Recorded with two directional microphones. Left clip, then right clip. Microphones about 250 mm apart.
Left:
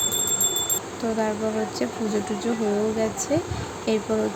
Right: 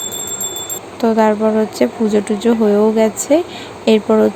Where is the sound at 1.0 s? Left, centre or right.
Right.